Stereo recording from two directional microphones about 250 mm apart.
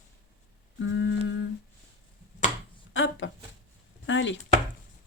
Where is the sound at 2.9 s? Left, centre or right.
Left.